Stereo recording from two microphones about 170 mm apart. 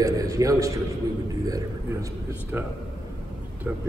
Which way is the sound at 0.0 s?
20° right (ahead or behind).